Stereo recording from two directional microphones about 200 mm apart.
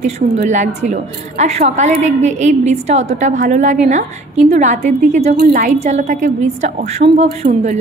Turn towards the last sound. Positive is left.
turn(degrees=-35)  # may be behind; listen again after turning